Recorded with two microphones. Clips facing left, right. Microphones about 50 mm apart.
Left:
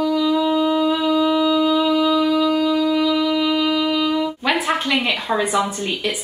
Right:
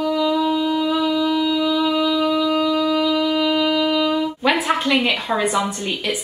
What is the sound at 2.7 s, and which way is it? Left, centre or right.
Wind instrument, centre.